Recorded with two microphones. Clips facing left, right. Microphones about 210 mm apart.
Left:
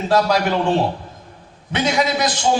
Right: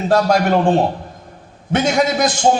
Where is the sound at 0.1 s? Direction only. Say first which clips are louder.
Right 3 dB; 50° right (ahead or behind).